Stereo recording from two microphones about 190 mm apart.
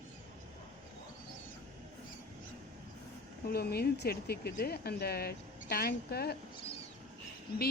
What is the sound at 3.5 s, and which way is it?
Speech, 55° left (ahead or behind).